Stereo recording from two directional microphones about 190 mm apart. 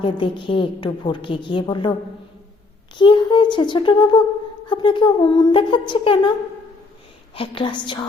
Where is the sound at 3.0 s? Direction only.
25° left (ahead or behind).